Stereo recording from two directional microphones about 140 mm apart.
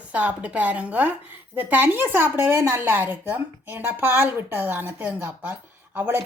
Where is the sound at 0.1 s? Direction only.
10° right (ahead or behind).